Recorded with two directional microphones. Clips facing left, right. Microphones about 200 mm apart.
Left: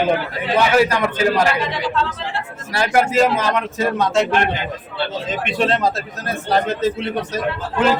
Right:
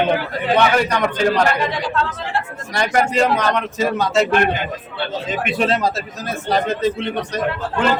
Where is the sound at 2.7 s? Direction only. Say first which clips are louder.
Left 1 dB; 5° left (ahead or behind).